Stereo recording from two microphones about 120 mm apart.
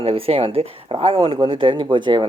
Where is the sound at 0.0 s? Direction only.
50° right (ahead or behind).